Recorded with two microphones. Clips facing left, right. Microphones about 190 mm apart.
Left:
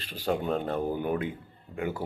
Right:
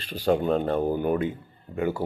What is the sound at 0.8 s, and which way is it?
Speech, 45° right (ahead or behind).